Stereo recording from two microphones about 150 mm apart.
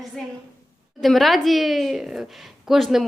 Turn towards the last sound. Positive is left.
turn(degrees=0)  # may be behind; listen again after turning